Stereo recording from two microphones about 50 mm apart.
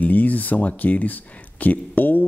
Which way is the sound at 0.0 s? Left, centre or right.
Left.